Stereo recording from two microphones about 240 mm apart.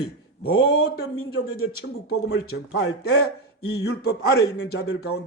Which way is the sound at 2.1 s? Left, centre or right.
Left.